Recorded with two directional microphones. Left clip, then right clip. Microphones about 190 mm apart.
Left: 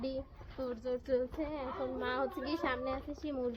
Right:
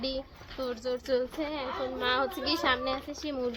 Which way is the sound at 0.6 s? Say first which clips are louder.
Right 5 dB; 10° right (ahead or behind).